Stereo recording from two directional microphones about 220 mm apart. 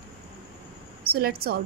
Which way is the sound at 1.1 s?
45° right (ahead or behind).